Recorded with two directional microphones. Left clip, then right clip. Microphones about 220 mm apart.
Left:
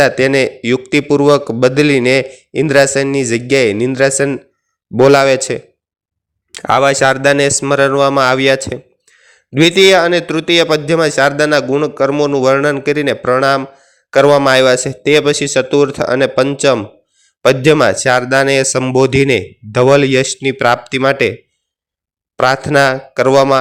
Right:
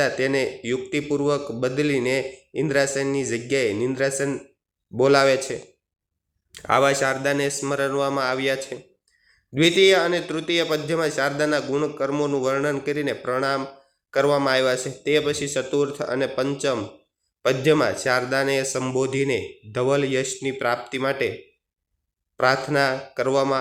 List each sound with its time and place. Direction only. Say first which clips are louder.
0.0 s speech: left 11 dB; 45° left (ahead or behind)
22.4 s speech: left 9 dB; 45° left (ahead or behind)